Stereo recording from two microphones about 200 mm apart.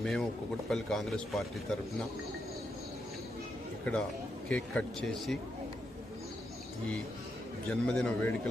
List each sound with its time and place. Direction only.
0.0 s a man's voice: centre (ahead or behind)
4.4 s a man's voice: 5° left (ahead or behind)
7.7 s a man's voice: 5° left (ahead or behind)